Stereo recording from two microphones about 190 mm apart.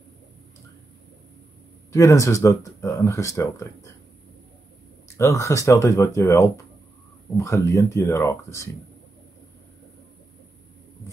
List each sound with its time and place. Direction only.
1.9 s speech: 15° left (ahead or behind)
5.1 s speech: 15° left (ahead or behind)